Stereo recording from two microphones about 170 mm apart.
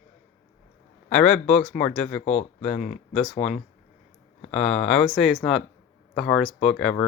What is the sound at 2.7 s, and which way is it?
Speech, 55° left (ahead or behind).